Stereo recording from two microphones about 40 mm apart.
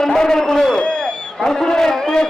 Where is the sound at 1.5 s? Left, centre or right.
Centre.